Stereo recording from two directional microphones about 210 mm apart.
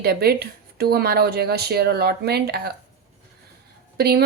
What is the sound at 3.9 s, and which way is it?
Speech, 50° right (ahead or behind).